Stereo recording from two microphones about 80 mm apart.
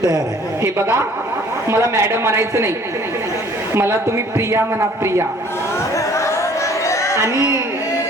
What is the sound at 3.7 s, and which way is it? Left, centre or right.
A woman's voice, right.